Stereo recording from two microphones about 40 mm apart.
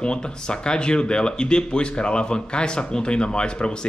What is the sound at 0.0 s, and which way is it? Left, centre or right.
A man's voice, left.